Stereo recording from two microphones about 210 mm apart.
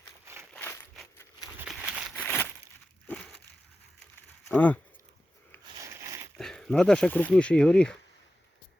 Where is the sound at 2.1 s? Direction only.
10° left (ahead or behind).